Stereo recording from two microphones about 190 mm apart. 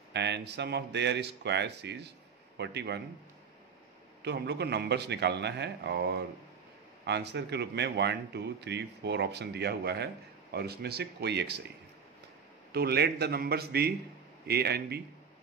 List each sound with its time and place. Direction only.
0.1 s speech: 65° right (ahead or behind)
4.2 s speech: 60° right (ahead or behind)
12.7 s speech: 55° right (ahead or behind)